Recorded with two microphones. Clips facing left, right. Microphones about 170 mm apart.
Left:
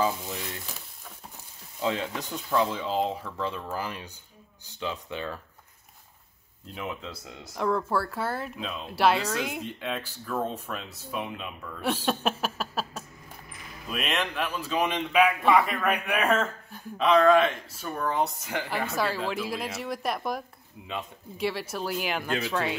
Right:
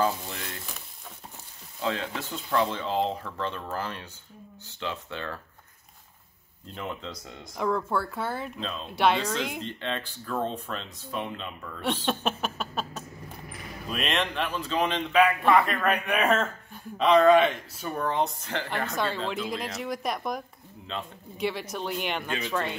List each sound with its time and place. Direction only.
0.0 s frying: 5° left (ahead or behind)
1.8 s speech: 15° left (ahead or behind)
2.6 s speech: 5° left (ahead or behind)
6.7 s speech: 5° left (ahead or behind)